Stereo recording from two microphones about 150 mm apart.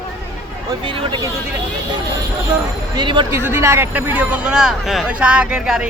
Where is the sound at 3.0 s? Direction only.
30° right (ahead or behind).